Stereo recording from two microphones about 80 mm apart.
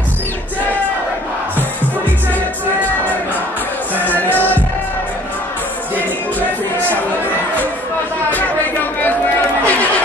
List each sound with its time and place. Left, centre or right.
8.3 s chatter: centre